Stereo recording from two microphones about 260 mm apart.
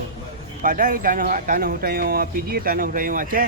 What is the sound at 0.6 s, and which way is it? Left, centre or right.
Speech, right.